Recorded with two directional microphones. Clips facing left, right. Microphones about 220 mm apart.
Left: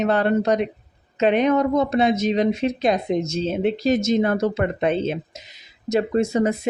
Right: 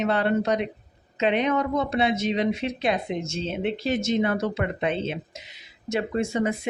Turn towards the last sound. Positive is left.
turn(degrees=40)  # may be behind; listen again after turning